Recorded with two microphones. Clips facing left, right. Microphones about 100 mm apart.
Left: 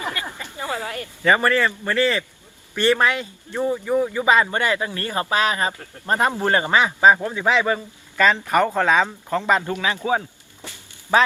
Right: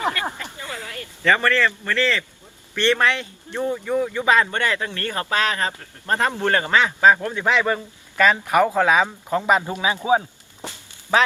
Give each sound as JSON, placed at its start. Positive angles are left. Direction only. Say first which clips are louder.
{"t": 0.4, "sound": "a sound", "louder": "right 1 dB", "side_deg": 15}
{"t": 0.9, "sound": "speech", "louder": "even", "side_deg": 15}
{"t": 8.2, "sound": "speech", "louder": "right 1 dB", "side_deg": -5}